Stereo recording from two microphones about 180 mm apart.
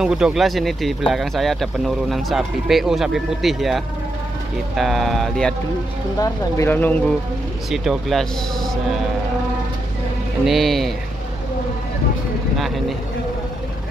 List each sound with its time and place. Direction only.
0.0 s speech: 5° right (ahead or behind)
6.1 s speech: 20° left (ahead or behind)
7.7 s speech: centre (ahead or behind)
10.4 s speech: centre (ahead or behind)
12.5 s vehicle: centre (ahead or behind)